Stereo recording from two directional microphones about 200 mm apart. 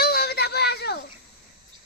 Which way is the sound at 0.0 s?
50° left (ahead or behind).